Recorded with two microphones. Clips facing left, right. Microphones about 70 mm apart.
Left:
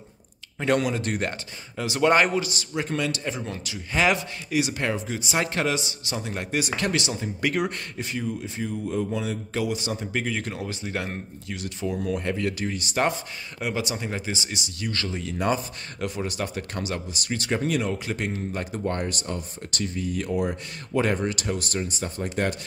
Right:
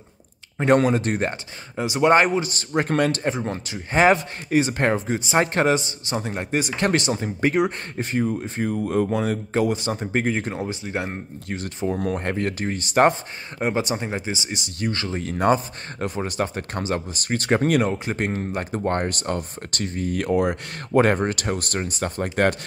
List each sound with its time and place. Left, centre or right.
0.6 s speech: right
2.4 s speech: right
9.5 s speech: right
11.4 s speech: right
14.1 s speech: right
17.9 s speech: right